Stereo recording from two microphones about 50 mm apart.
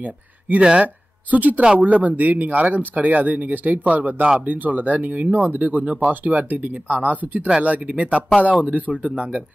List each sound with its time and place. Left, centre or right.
0.0 s speech: right